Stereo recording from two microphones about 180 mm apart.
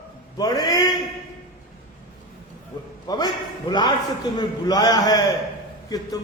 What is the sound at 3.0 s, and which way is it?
A man's voice, 20° left (ahead or behind).